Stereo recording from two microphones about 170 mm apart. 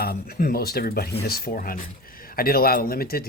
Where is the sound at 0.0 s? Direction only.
60° left (ahead or behind).